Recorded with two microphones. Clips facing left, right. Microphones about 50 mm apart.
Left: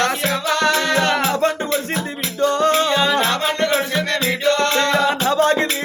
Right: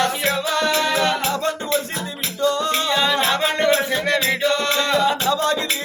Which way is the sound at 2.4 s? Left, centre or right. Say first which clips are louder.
Left 4 dB; left.